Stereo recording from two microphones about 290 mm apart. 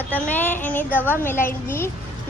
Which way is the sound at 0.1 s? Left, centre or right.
Centre.